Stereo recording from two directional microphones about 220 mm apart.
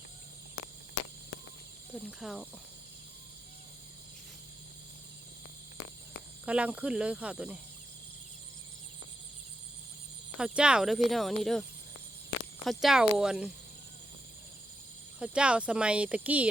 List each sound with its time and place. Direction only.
1.9 s speech: 5° right (ahead or behind)
6.4 s speech: 5° right (ahead or behind)
10.3 s speech: 5° right (ahead or behind)
12.6 s speech: centre (ahead or behind)
15.2 s speech: 5° right (ahead or behind)